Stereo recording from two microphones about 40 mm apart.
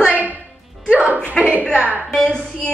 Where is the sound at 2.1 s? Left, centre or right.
Centre.